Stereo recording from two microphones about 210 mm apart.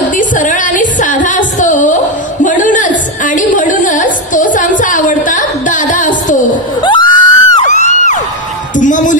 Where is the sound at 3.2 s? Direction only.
40° left (ahead or behind).